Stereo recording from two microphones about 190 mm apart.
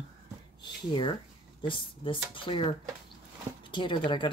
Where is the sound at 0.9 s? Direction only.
25° left (ahead or behind).